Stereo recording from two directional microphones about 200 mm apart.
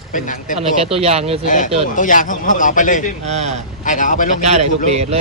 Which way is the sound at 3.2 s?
35° right (ahead or behind).